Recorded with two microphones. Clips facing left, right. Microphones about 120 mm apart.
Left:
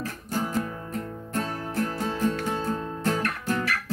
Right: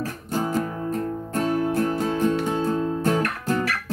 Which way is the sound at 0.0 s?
15° right (ahead or behind).